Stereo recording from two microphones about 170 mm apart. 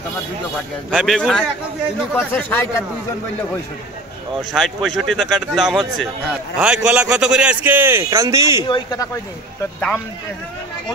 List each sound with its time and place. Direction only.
0.9 s speech: centre (ahead or behind)
2.1 s speech: 15° left (ahead or behind)
4.4 s a man's voice: centre (ahead or behind); by 8.6 s 15° right (ahead or behind)
8.6 s speech: 25° left (ahead or behind)
9.8 s speech: 10° left (ahead or behind)